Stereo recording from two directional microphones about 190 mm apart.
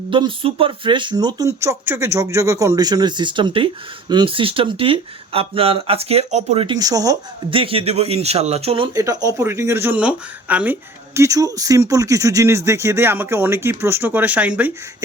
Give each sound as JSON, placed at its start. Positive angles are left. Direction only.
{"t": 0.1, "sound": "speech", "side_deg": -25}
{"t": 9.0, "sound": "speech", "side_deg": -15}